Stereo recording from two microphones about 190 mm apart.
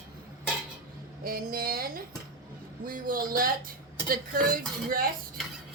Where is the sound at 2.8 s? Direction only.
45° right (ahead or behind).